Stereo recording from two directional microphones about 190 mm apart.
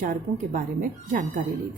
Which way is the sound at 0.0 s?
45° right (ahead or behind).